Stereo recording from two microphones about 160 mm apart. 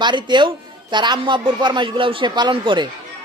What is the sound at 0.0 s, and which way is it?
A man's voice, 30° right (ahead or behind).